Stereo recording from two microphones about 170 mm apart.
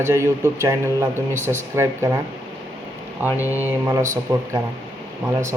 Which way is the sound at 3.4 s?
10° right (ahead or behind).